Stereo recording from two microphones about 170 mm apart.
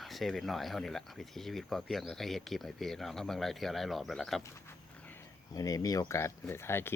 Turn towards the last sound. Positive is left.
turn(degrees=15)  # may be behind; listen again after turning